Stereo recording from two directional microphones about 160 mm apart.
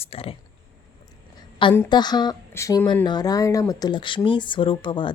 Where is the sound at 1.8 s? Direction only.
25° left (ahead or behind).